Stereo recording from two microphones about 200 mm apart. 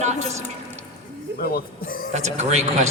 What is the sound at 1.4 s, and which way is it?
Speech, 45° left (ahead or behind).